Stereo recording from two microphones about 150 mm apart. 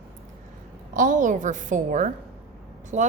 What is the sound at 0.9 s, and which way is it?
A woman's voice, 60° right (ahead or behind).